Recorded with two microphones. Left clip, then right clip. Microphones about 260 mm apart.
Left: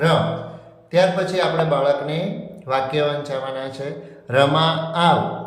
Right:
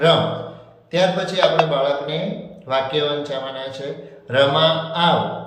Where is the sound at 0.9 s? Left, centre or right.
Left.